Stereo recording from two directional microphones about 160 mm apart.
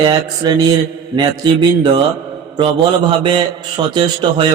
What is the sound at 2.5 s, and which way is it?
Speech, 30° right (ahead or behind).